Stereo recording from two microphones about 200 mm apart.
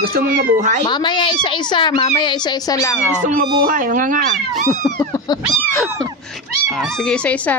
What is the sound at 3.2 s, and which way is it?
Speech, 40° right (ahead or behind).